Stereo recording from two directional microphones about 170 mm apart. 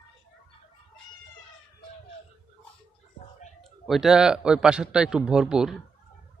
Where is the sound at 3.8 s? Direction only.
Centre (ahead or behind).